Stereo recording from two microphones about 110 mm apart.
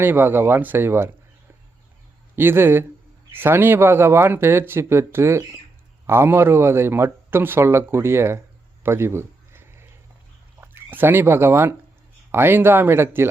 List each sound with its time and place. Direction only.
0.0 s speech: 20° right (ahead or behind)
2.3 s speech: 20° right (ahead or behind)
8.8 s a sound: 25° right (ahead or behind)
10.6 s speech: 20° right (ahead or behind)